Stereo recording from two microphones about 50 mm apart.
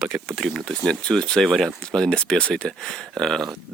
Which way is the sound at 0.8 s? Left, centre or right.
Centre.